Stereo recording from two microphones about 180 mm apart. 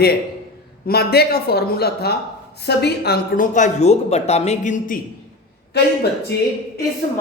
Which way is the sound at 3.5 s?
40° left (ahead or behind).